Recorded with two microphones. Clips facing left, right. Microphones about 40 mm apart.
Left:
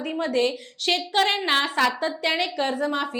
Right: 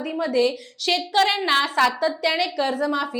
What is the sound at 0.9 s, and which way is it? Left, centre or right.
A woman's voice, centre.